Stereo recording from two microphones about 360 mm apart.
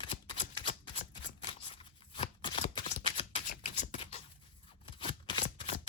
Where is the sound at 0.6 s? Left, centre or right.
Centre.